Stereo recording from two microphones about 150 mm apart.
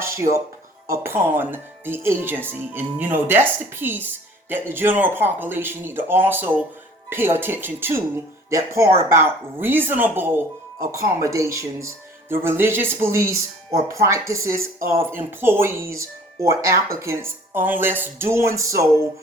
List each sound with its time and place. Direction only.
0.0 s speech: 20° right (ahead or behind)